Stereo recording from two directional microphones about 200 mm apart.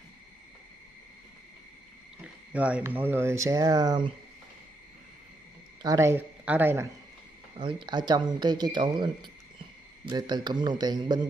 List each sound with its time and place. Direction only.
2.2 s speech: 5° right (ahead or behind)
5.8 s speech: 15° right (ahead or behind)
7.5 s speech: 25° right (ahead or behind)